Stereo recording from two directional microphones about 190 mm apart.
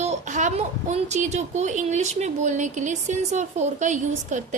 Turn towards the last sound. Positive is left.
turn(degrees=-40)  # may be behind; listen again after turning